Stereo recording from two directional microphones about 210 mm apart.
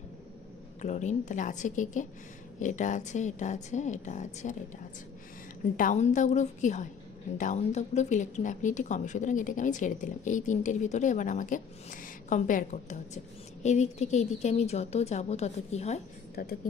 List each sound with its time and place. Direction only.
0.8 s speech: 35° left (ahead or behind)
5.8 s speech: 35° left (ahead or behind)
16.4 s a woman's voice: 45° left (ahead or behind)